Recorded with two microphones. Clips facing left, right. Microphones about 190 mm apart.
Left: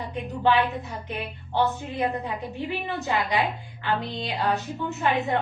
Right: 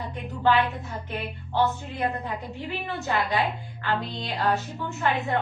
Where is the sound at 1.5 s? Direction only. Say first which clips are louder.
Left 1 dB; 15° left (ahead or behind).